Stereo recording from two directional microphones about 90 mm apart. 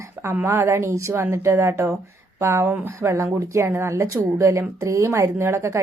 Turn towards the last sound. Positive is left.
turn(degrees=-30)  # may be behind; listen again after turning